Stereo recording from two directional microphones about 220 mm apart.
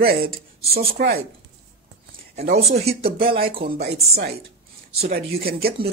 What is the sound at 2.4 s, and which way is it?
Speech, 30° right (ahead or behind).